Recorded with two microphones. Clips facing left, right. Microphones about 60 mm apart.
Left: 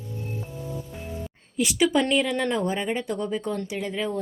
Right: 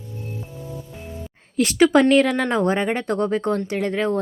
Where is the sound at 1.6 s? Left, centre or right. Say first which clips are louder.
Right 7 dB; right.